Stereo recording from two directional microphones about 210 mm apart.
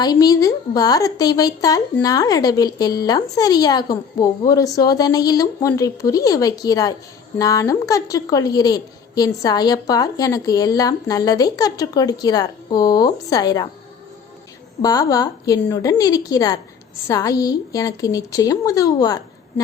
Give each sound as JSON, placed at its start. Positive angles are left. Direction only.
{"t": 0.0, "sound": "a woman's voice", "side_deg": 20}
{"t": 14.8, "sound": "a woman's voice", "side_deg": 15}